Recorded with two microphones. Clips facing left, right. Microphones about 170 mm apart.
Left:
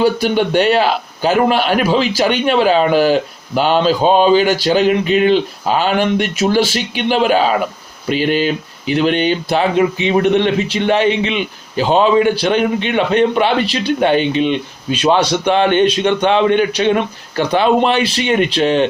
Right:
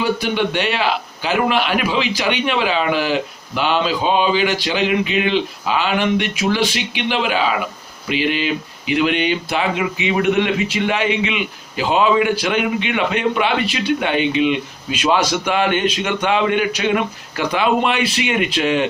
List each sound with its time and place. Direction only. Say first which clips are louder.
0.0 s a man's voice: left 5 dB; 40° left (ahead or behind)